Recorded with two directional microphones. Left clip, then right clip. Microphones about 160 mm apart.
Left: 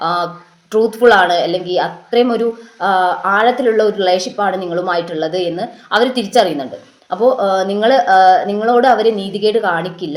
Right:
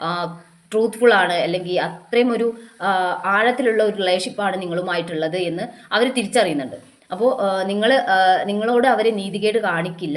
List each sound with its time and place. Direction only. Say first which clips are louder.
0.0 s speech: left 7 dB; 15° right (ahead or behind)